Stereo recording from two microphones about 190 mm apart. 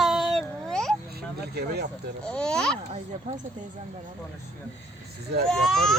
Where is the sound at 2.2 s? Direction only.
5° left (ahead or behind).